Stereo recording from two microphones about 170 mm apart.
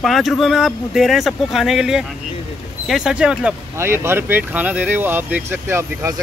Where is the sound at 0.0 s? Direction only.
Centre (ahead or behind).